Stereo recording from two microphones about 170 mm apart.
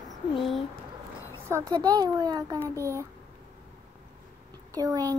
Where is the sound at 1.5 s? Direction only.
20° right (ahead or behind).